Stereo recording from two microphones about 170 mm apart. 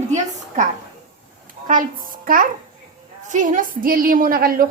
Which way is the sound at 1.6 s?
50° right (ahead or behind).